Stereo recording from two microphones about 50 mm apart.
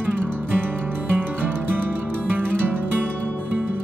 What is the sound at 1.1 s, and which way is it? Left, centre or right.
Music, right.